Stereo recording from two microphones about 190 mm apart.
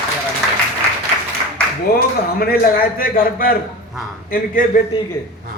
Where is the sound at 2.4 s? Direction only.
50° left (ahead or behind).